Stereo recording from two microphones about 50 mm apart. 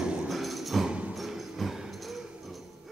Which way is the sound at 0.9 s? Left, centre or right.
Right.